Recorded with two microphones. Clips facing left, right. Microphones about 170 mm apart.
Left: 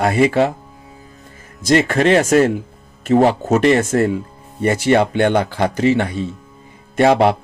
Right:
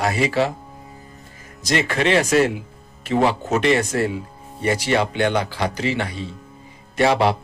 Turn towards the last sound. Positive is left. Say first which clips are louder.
# left 5 dB
turn(degrees=50)  # may be behind; listen again after turning